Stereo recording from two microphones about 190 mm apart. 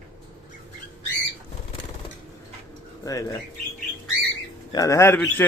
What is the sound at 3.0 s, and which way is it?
Speech, 15° left (ahead or behind).